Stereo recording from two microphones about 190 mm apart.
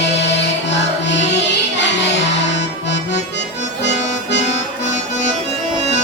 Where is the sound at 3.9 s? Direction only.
65° left (ahead or behind).